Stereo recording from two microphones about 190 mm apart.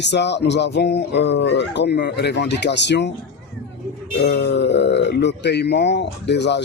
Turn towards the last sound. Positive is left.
turn(degrees=65)  # may be behind; listen again after turning